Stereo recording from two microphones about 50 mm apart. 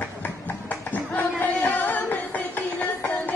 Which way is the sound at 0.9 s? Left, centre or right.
Left.